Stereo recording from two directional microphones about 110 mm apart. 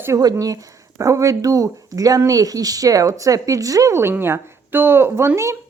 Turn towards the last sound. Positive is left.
turn(degrees=-25)  # may be behind; listen again after turning